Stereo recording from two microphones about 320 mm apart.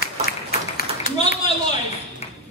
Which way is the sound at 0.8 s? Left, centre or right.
Left.